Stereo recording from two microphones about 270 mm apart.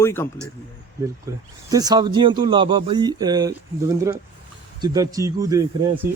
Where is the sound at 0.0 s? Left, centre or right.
Centre.